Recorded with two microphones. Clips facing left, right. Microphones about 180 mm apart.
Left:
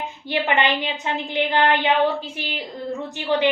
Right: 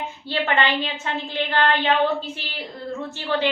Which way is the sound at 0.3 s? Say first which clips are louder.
Left 1 dB; 15° left (ahead or behind).